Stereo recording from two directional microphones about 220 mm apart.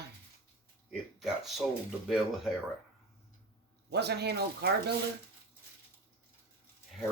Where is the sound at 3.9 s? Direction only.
50° right (ahead or behind).